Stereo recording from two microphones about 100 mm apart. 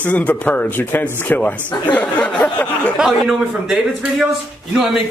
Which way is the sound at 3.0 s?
5° right (ahead or behind).